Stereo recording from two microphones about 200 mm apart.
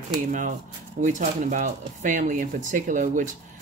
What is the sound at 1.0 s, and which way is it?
Speech, 40° right (ahead or behind).